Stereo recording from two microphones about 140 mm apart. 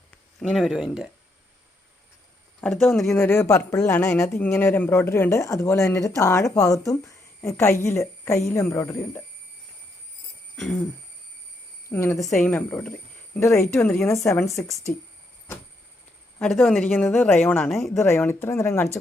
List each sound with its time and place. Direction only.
0.4 s speech: centre (ahead or behind)
2.6 s speech: 5° left (ahead or behind)
3.2 s speech: 15° left (ahead or behind)
10.6 s speech: 10° left (ahead or behind)
11.9 s speech: 20° left (ahead or behind)
12.3 s speech: centre (ahead or behind); by 14.8 s 20° left (ahead or behind)
16.4 s speech: centre (ahead or behind)
17.0 s speech: 15° left (ahead or behind)